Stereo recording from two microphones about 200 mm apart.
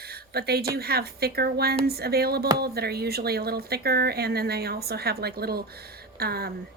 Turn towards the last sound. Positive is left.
turn(degrees=-50)  # may be behind; listen again after turning